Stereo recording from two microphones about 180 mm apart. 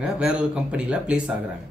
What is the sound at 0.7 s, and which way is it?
Speech, 5° right (ahead or behind).